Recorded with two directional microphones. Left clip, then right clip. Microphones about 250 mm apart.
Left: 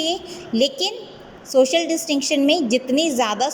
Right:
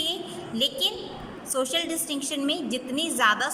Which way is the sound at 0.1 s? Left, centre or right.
Centre.